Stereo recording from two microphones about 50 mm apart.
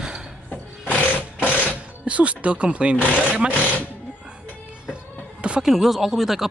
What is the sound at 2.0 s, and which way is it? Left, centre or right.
Speech, right.